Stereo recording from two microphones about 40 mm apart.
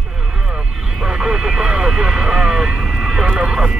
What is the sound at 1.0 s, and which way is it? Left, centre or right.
Vehicle, centre.